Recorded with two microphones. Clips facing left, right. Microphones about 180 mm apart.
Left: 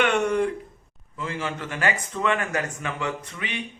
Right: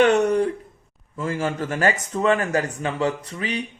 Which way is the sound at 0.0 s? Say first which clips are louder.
Right 5 dB; 40° right (ahead or behind).